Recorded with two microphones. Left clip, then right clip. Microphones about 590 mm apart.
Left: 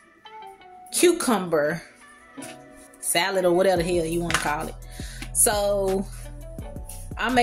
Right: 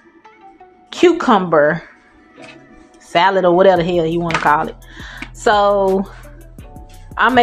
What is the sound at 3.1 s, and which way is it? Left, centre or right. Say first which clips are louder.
Speech: right 9 dB; left.